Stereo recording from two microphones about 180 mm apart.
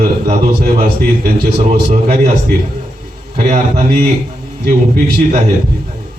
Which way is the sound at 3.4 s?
40° right (ahead or behind).